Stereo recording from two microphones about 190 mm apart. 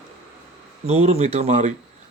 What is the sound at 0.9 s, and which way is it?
Speech, 35° right (ahead or behind).